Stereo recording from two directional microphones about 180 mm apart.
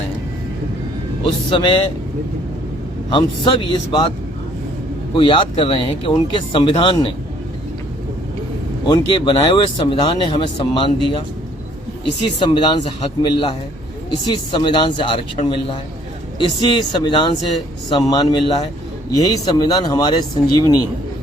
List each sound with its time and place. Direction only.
1.2 s speech: 25° left (ahead or behind)
3.1 s speech: 25° left (ahead or behind)
5.1 s speech: 25° left (ahead or behind)
8.9 s speech: 25° left (ahead or behind)
12.2 s speech: 25° left (ahead or behind)
16.4 s speech: 25° left (ahead or behind)